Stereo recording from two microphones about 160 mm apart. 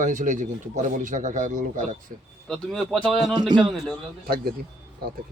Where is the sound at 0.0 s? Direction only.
55° right (ahead or behind).